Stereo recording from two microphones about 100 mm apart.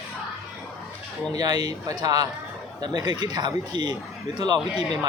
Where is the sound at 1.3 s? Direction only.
40° right (ahead or behind).